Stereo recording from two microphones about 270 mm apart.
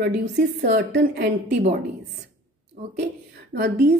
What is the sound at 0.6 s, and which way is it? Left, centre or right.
Speech, right.